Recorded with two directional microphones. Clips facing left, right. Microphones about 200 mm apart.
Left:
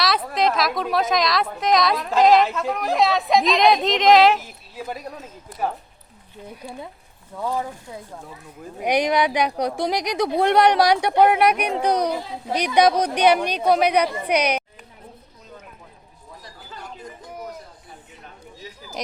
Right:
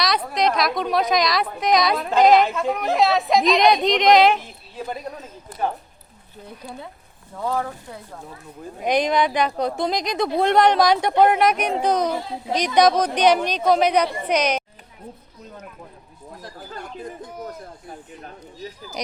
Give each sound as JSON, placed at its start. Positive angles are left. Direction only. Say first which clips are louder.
{"t": 0.0, "sound": "a woman's voice", "louder": "even", "side_deg": 0}
{"t": 7.4, "sound": "speech", "louder": "right 1 dB", "side_deg": 10}
{"t": 8.8, "sound": "speech", "louder": "even", "side_deg": 10}
{"t": 16.4, "sound": "a sound", "louder": "right 5 dB", "side_deg": -55}